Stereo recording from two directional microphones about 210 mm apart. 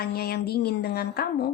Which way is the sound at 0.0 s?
50° left (ahead or behind).